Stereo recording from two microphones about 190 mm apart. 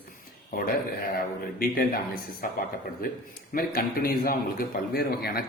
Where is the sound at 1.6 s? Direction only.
50° left (ahead or behind).